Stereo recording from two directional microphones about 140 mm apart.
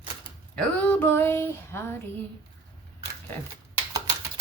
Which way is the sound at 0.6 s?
10° left (ahead or behind).